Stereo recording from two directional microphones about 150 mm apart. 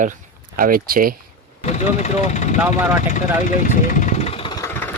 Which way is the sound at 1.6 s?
50° left (ahead or behind).